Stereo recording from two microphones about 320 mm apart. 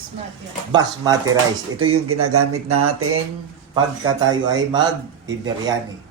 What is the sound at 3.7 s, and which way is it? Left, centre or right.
Speech, centre.